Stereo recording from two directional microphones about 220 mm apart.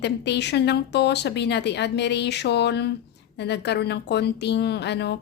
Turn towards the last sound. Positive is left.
turn(degrees=50)  # may be behind; listen again after turning